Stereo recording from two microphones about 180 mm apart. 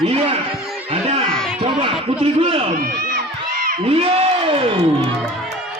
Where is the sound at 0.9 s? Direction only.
30° right (ahead or behind).